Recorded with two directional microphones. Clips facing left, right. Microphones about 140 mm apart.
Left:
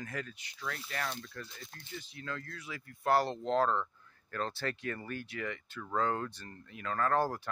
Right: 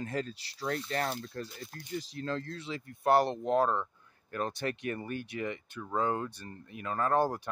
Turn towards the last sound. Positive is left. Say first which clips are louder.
# right 2 dB
turn(degrees=-20)  # may be behind; listen again after turning